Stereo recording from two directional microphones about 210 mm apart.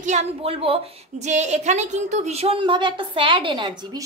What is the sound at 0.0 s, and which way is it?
A woman's voice, 30° right (ahead or behind).